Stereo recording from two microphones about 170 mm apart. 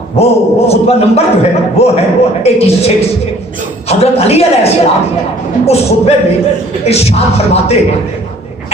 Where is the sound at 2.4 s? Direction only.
35° left (ahead or behind).